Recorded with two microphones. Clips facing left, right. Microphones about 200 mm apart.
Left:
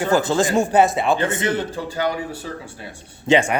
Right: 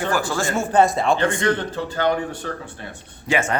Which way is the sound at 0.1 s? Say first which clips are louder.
Left 8 dB; 20° left (ahead or behind).